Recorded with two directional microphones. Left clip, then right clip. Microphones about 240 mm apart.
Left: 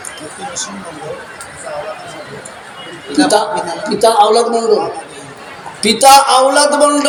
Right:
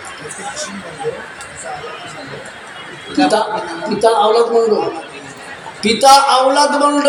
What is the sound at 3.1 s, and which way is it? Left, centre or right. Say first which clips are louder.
A man's voice: left 2 dB; left.